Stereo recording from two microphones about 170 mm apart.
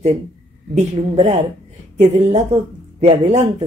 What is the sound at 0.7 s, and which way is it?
Speech, 40° right (ahead or behind).